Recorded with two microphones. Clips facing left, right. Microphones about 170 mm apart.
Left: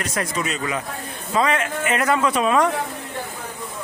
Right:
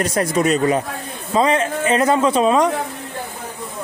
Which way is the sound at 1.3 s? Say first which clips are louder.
Right 4 dB; 30° right (ahead or behind).